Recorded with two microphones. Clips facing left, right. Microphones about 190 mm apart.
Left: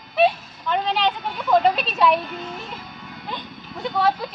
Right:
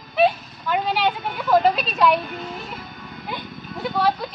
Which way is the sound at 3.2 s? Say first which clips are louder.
Right 2 dB; 5° right (ahead or behind).